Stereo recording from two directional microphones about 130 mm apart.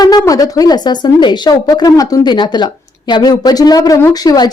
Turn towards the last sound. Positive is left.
turn(degrees=30)  # may be behind; listen again after turning